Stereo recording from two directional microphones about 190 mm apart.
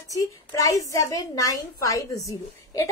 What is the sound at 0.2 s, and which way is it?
A woman's voice, 20° left (ahead or behind).